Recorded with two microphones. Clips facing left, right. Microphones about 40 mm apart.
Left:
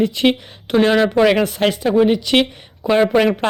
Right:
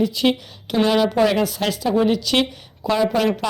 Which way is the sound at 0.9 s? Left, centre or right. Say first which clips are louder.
Left 2 dB; left.